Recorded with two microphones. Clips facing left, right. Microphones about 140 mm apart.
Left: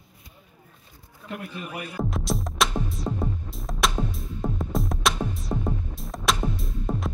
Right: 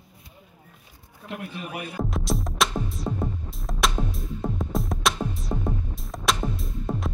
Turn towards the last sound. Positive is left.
turn(degrees=0)  # may be behind; listen again after turning